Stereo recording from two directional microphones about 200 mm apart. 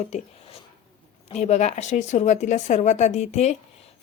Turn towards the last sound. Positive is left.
turn(degrees=35)  # may be behind; listen again after turning